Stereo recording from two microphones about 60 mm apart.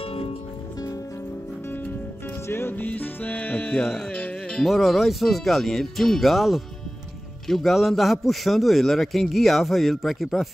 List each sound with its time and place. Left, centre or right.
2.4 s music: left
4.6 s a man's voice: centre